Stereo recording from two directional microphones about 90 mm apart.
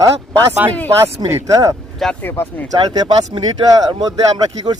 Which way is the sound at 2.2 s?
25° left (ahead or behind).